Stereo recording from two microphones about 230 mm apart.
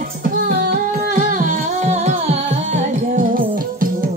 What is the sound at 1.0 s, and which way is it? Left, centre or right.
Music, right.